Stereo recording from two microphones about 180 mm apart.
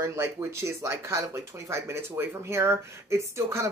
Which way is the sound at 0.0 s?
15° right (ahead or behind).